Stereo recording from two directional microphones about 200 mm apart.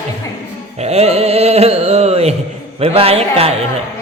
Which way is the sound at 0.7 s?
30° right (ahead or behind).